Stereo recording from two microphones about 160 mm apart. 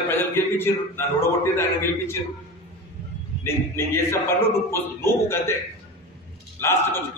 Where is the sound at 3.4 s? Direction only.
15° left (ahead or behind).